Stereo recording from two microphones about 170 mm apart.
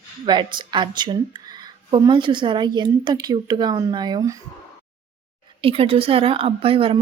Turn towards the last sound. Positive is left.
turn(degrees=-35)  # may be behind; listen again after turning